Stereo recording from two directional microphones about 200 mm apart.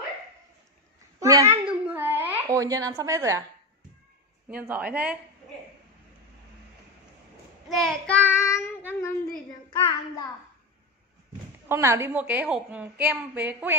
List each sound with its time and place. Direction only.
1.2 s a sound: 15° right (ahead or behind)
1.7 s babbling: 10° right (ahead or behind)
2.5 s a woman's voice: 15° right (ahead or behind)
4.5 s a woman's voice: 10° right (ahead or behind)
7.7 s child singing: 5° left (ahead or behind); by 10.2 s 20° left (ahead or behind)
11.7 s a woman's voice: 15° right (ahead or behind)